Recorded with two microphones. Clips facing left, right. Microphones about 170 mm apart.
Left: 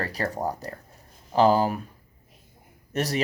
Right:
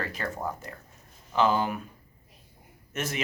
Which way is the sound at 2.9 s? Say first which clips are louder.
Left 6 dB; 35° left (ahead or behind).